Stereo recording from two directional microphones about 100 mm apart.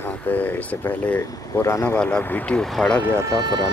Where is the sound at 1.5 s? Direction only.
30° left (ahead or behind).